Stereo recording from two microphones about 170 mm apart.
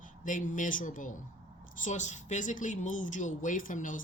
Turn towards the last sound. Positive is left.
turn(degrees=50)  # may be behind; listen again after turning